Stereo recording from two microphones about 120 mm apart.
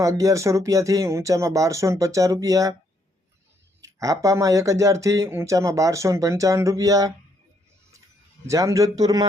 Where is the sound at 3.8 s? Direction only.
30° right (ahead or behind).